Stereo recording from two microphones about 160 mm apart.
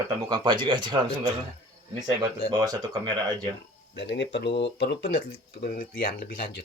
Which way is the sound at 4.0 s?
90° left.